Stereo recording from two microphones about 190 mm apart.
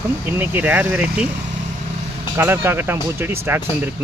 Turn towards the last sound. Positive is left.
turn(degrees=-10)  # may be behind; listen again after turning